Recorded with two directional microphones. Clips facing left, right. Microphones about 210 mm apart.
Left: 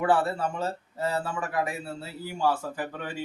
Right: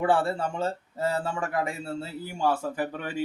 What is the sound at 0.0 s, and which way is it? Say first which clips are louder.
Speech: even; 30° right (ahead or behind).